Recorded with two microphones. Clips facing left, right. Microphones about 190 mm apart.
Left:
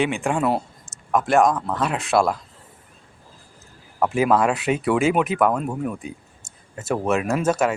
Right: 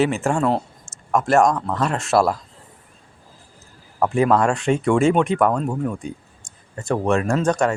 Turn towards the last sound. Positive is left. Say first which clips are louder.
# right 1 dB
turn(degrees=5)  # may be behind; listen again after turning